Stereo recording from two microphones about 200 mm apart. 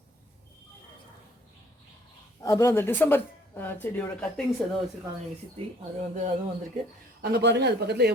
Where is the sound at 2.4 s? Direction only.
15° left (ahead or behind).